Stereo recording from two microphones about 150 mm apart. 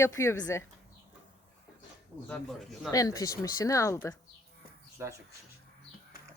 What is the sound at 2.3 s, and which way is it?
Speech, centre (ahead or behind).